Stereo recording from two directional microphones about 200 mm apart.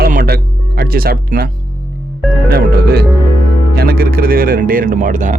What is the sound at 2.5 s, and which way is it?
Speech, 50° right (ahead or behind).